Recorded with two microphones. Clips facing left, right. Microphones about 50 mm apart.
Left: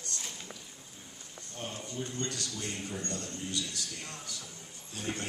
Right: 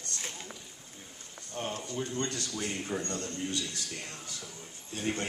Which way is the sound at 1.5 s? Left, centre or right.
Right.